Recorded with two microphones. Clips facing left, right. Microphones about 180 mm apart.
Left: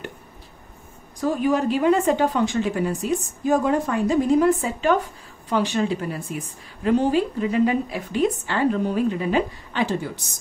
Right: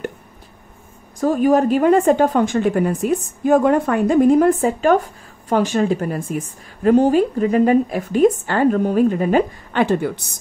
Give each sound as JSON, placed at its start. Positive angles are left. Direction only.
{"t": 1.2, "sound": "a woman's voice", "side_deg": -50}